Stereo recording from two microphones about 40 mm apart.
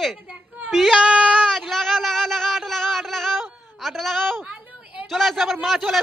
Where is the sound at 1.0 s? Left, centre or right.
Right.